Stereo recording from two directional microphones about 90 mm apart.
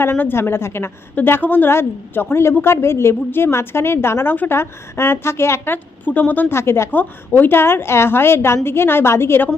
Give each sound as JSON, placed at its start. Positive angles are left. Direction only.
{"t": 0.0, "sound": "a woman's voice", "side_deg": 25}